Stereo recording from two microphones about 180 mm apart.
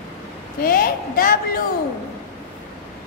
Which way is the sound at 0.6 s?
55° left (ahead or behind).